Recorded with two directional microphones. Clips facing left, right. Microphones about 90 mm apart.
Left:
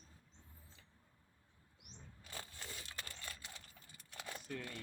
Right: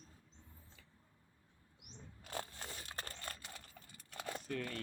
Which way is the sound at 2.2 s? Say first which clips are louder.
Right 7 dB; 45° right (ahead or behind).